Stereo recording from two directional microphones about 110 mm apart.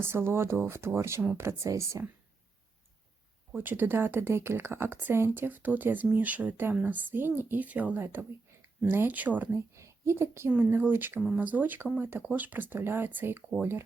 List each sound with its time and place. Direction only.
0.0 s speech: 20° right (ahead or behind)
3.5 s speech: 15° right (ahead or behind)
9.7 s speech: 25° right (ahead or behind)